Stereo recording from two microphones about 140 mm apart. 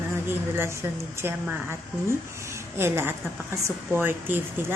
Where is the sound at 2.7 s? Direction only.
15° right (ahead or behind).